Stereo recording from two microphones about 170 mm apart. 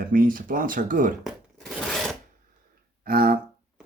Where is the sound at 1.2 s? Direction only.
Centre (ahead or behind).